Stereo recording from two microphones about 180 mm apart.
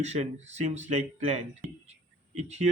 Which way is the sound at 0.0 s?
40° right (ahead or behind).